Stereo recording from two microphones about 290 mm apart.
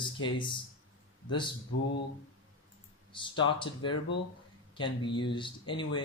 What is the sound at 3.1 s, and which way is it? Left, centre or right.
Speech, centre.